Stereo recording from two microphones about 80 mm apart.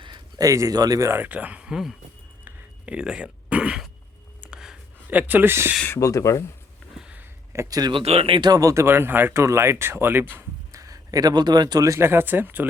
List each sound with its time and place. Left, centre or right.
0.3 s speech: right
1.1 s speech: centre
2.4 s a sound: centre
5.0 s speech: right
6.0 s speech: left
7.7 s speech: right
7.9 s speech: right
8.4 s speech: right
10.7 s speech: right
11.9 s speech: right